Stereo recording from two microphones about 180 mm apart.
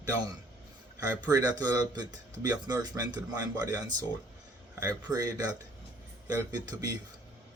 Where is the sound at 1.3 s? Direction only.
20° right (ahead or behind).